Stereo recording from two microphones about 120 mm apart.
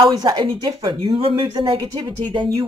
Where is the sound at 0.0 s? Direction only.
35° right (ahead or behind).